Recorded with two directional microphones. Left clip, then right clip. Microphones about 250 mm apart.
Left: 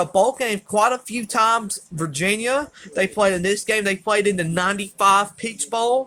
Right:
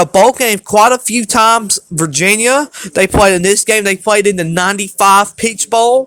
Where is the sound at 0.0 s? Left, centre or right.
Right.